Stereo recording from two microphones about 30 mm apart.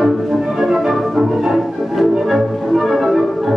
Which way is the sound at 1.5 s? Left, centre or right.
Centre.